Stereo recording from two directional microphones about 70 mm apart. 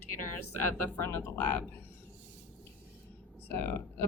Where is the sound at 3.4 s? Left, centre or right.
Left.